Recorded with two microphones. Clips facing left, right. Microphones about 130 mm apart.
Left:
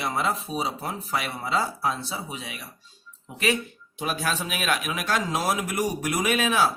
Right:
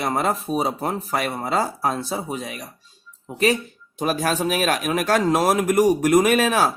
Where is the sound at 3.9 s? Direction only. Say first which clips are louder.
Right 6 dB; 45° right (ahead or behind).